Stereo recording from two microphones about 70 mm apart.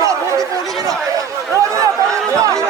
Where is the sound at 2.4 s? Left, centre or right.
Right.